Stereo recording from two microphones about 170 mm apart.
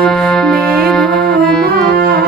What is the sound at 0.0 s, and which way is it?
Music, 5° left (ahead or behind).